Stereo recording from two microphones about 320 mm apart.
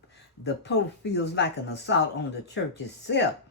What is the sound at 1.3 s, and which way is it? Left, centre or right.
Speech, left.